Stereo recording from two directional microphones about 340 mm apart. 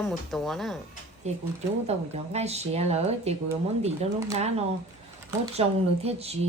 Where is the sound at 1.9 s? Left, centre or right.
Centre.